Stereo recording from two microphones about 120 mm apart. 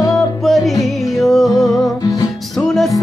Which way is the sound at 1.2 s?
Centre (ahead or behind).